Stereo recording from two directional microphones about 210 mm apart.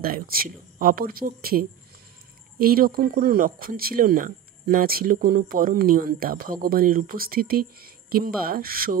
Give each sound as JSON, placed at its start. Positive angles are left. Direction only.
{"t": 0.0, "sound": "speech", "side_deg": -45}